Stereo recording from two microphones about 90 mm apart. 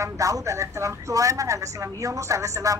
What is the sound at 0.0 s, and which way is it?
A woman's voice, 35° right (ahead or behind).